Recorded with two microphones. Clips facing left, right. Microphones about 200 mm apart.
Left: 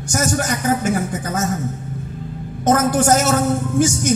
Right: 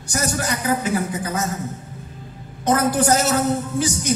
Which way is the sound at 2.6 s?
45° left (ahead or behind).